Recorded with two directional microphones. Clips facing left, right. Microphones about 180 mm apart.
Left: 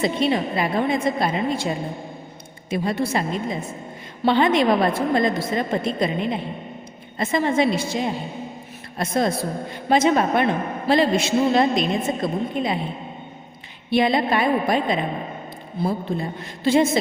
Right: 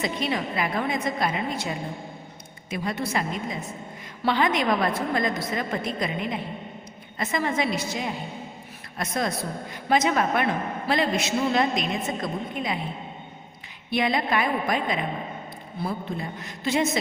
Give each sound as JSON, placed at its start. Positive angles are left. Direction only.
{"t": 0.0, "sound": "a woman's voice", "side_deg": 30}
{"t": 13.9, "sound": "a woman's voice", "side_deg": 30}